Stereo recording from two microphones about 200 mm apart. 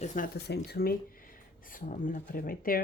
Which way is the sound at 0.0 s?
35° left (ahead or behind).